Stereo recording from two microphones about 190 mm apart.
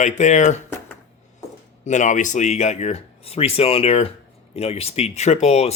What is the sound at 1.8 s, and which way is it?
Speech, 40° left (ahead or behind).